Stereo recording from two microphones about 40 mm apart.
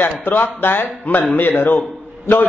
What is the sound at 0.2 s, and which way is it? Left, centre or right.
A man's voice, left.